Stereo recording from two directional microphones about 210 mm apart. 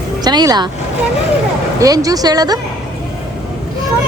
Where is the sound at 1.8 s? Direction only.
15° right (ahead or behind).